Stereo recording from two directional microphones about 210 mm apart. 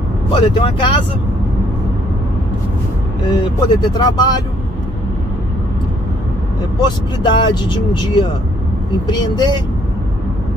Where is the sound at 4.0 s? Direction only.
20° left (ahead or behind).